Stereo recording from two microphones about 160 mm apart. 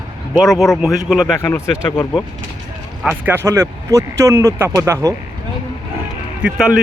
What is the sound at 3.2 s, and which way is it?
Speech, 15° right (ahead or behind).